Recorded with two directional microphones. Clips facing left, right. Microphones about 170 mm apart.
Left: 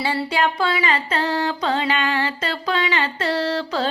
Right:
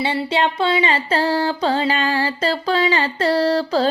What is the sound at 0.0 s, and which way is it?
Speech, 20° right (ahead or behind).